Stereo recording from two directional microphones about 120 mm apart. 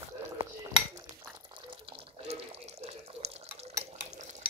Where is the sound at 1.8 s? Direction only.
60° right (ahead or behind).